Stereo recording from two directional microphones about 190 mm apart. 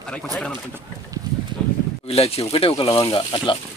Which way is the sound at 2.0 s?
30° left (ahead or behind).